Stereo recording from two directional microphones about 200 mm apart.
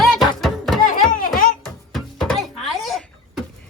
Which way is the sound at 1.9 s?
Centre (ahead or behind).